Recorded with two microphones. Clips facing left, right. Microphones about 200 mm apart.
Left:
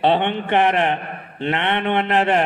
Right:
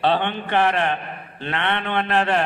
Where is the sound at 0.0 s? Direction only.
20° left (ahead or behind).